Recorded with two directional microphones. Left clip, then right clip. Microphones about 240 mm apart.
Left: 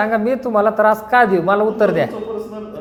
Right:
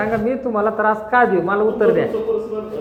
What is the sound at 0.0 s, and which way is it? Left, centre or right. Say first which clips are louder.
A woman's voice: left 3 dB; left.